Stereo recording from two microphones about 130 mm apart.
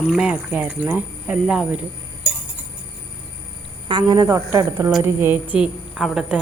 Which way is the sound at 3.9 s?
35° right (ahead or behind).